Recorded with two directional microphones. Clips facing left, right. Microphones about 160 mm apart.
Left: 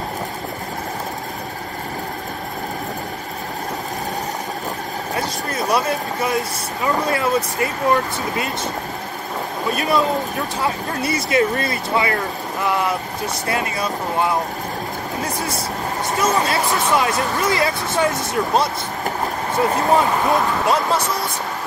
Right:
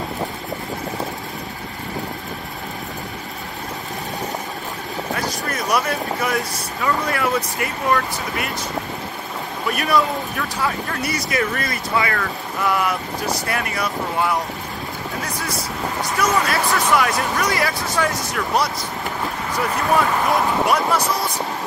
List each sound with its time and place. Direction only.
5.1 s speech: 25° left (ahead or behind)
9.7 s speech: 25° left (ahead or behind)